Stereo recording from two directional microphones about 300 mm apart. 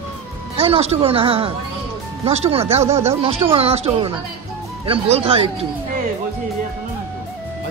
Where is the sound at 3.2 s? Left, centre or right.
Centre.